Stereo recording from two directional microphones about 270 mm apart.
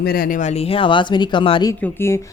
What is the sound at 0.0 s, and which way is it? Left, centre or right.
Speech, left.